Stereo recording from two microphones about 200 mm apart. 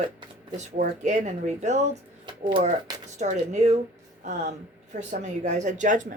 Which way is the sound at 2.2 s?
25° right (ahead or behind).